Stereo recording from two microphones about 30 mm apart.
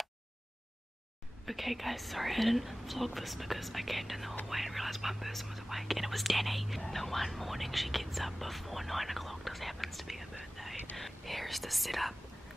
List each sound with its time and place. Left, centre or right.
1.4 s speech: centre